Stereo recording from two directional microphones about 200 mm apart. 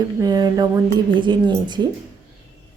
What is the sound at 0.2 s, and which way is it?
A woman's voice, 20° right (ahead or behind).